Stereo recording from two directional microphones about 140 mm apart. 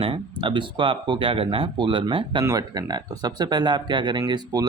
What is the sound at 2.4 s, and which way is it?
Speech, 25° right (ahead or behind).